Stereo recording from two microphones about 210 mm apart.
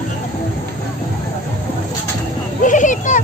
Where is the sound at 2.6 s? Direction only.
35° left (ahead or behind).